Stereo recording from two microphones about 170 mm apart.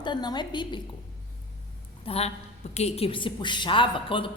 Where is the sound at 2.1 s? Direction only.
35° left (ahead or behind).